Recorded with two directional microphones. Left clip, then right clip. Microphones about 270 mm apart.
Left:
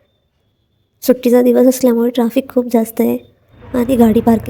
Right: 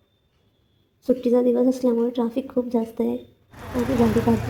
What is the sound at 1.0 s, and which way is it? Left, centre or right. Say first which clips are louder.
A woman's voice: left 9 dB; left.